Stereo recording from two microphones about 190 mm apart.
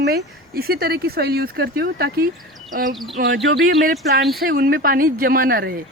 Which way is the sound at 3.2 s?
70° right (ahead or behind).